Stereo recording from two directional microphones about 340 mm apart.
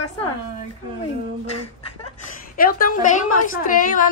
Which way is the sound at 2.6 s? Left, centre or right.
Left.